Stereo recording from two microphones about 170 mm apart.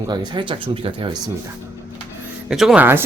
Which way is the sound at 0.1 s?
25° right (ahead or behind).